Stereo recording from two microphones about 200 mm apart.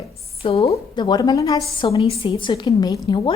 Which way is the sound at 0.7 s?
20° left (ahead or behind).